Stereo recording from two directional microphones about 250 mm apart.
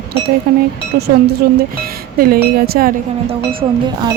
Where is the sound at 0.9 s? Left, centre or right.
Right.